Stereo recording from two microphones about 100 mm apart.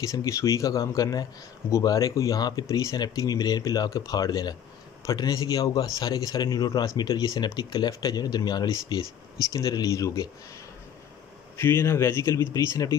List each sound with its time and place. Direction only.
0.0 s speech: 30° left (ahead or behind)
11.5 s speech: 25° left (ahead or behind)